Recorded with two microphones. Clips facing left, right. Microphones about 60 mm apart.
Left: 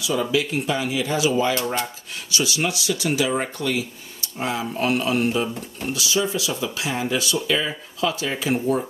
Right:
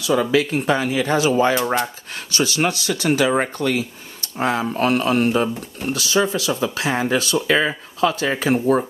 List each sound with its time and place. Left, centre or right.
0.0 s speech: right
1.5 s speech: right
2.3 s speech: right